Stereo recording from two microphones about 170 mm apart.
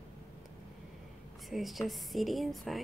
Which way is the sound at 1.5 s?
Centre (ahead or behind).